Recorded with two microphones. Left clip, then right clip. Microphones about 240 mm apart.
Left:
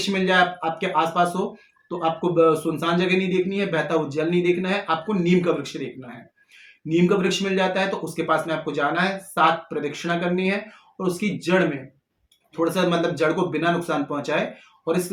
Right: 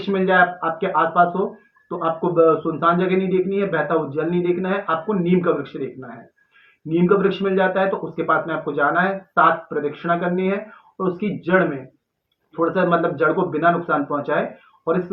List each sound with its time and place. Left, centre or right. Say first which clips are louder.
0.0 s speech: right 3 dB; left
6.8 s speech: right 3 dB; left